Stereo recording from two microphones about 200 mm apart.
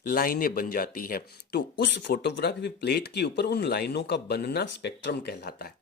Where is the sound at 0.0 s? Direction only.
45° left (ahead or behind).